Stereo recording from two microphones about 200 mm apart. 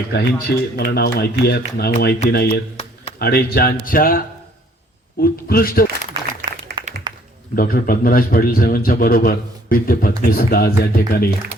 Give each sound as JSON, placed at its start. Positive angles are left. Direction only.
{"t": 0.1, "sound": "a man's voice", "side_deg": 55}
{"t": 2.7, "sound": "a sound", "side_deg": 30}
{"t": 3.2, "sound": "a man's voice", "side_deg": 50}
{"t": 5.2, "sound": "a man's voice", "side_deg": 50}
{"t": 6.4, "sound": "applause", "side_deg": -55}
{"t": 7.1, "sound": "typing", "side_deg": -20}
{"t": 7.5, "sound": "a man's voice", "side_deg": 45}